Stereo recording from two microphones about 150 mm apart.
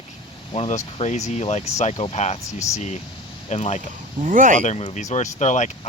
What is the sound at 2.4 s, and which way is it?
Speech, 20° left (ahead or behind).